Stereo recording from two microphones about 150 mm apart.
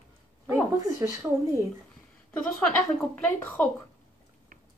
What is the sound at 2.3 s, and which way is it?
Speech, 5° left (ahead or behind).